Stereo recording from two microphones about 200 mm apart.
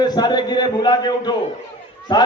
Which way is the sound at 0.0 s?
20° left (ahead or behind).